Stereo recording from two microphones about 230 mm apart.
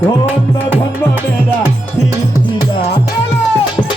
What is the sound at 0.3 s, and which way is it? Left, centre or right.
Music, centre.